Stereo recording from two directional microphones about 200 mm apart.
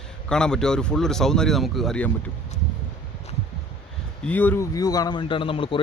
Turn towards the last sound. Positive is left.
turn(degrees=25)  # may be behind; listen again after turning